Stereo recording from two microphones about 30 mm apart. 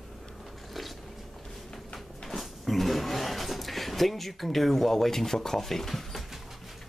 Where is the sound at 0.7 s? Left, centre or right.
Centre.